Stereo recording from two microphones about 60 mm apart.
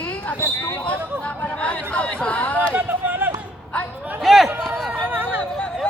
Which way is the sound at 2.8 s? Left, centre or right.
Right.